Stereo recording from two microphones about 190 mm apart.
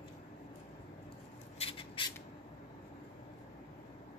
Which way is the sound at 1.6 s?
30° left (ahead or behind).